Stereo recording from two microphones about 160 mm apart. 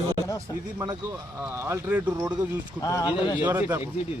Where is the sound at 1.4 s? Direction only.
15° right (ahead or behind).